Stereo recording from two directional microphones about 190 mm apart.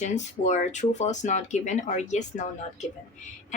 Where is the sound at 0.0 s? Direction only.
40° left (ahead or behind).